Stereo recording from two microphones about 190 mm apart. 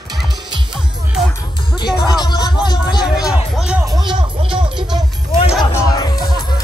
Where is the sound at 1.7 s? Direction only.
25° left (ahead or behind).